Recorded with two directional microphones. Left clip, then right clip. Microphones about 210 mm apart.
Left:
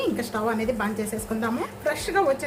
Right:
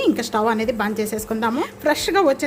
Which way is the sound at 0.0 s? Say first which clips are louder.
Right 7 dB; 45° right (ahead or behind).